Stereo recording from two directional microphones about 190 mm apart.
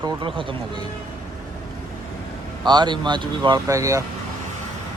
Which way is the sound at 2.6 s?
25° right (ahead or behind).